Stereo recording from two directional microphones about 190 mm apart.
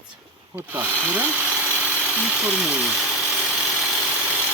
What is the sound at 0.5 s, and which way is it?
Tools, 10° right (ahead or behind).